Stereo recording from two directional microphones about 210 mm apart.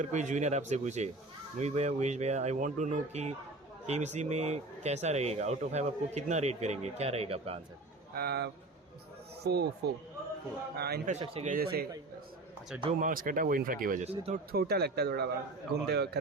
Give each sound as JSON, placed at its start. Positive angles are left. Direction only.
{"t": 0.0, "sound": "speech", "side_deg": -35}
{"t": 8.1, "sound": "a man's voice", "side_deg": -50}
{"t": 10.8, "sound": "a man's voice", "side_deg": -50}
{"t": 11.1, "sound": "speech", "side_deg": -30}
{"t": 11.5, "sound": "a man's voice", "side_deg": -45}
{"t": 12.8, "sound": "speech", "side_deg": -35}
{"t": 14.5, "sound": "a man's voice", "side_deg": -50}